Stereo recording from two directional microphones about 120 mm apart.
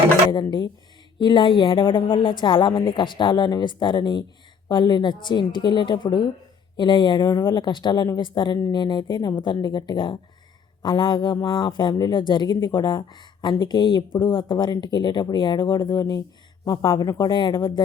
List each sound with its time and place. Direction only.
1.2 s speech: 40° left (ahead or behind)